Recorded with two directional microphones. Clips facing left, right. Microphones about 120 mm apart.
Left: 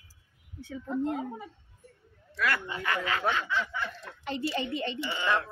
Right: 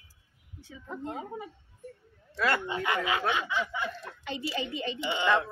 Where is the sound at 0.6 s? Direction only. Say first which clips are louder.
Left 8 dB; 55° left (ahead or behind).